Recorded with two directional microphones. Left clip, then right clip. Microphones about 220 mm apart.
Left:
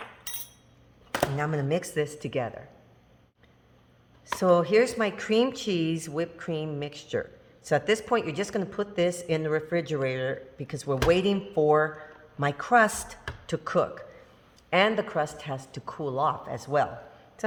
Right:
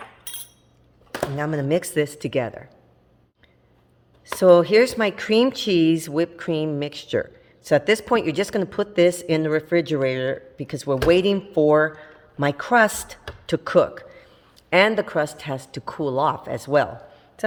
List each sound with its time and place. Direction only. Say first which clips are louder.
1.6 s speech: right 6 dB; 45° right (ahead or behind)
4.4 s speech: right 8 dB; 45° right (ahead or behind)